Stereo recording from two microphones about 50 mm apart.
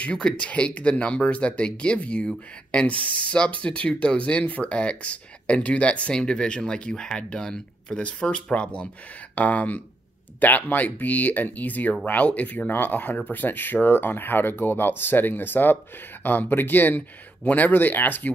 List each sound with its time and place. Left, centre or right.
0.0 s speech: left